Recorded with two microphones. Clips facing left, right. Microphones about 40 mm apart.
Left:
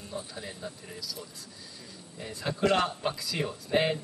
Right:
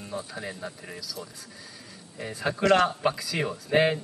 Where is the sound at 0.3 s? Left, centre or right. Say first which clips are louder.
Right 4 dB; right.